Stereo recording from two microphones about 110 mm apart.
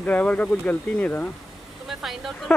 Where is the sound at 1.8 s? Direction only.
Centre (ahead or behind).